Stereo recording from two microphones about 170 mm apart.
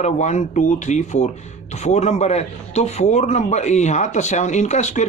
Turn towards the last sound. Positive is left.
turn(degrees=45)  # may be behind; listen again after turning